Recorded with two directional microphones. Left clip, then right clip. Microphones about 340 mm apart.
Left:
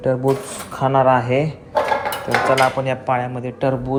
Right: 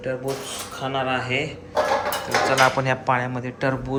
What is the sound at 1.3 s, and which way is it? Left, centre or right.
Speech, left.